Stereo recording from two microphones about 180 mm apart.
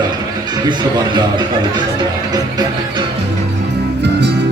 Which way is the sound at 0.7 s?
25° right (ahead or behind).